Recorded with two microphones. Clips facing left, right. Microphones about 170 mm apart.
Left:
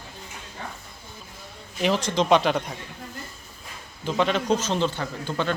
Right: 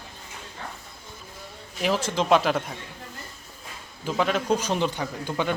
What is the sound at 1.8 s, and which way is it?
Speech, 5° right (ahead or behind).